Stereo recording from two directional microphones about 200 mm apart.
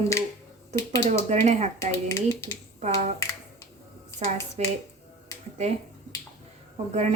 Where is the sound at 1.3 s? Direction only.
35° right (ahead or behind).